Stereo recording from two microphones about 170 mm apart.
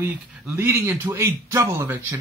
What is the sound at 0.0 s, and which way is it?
Speech, 10° right (ahead or behind).